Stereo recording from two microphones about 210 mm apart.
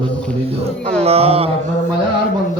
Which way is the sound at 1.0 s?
30° right (ahead or behind).